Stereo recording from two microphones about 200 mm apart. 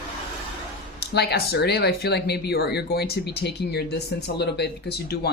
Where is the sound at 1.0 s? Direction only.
55° left (ahead or behind).